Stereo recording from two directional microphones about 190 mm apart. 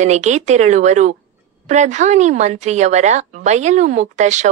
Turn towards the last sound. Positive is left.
turn(degrees=-40)  # may be behind; listen again after turning